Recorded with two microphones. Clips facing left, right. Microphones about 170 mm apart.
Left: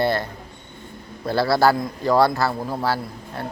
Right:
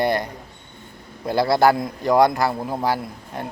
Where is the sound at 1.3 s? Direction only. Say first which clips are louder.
Right 1 dB; 20° right (ahead or behind).